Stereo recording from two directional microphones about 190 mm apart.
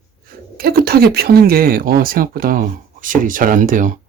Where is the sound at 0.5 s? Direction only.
50° right (ahead or behind).